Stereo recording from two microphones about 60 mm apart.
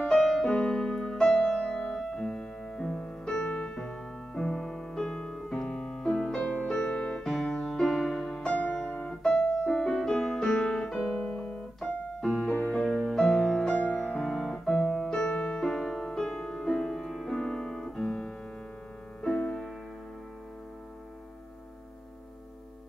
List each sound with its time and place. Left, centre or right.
0.0 s music: centre
5.4 s piano: centre
7.2 s music: centre
8.5 s music: centre
9.3 s music: centre
10.9 s piano: centre
12.3 s music: centre
17.4 s piano: centre
19.2 s music: centre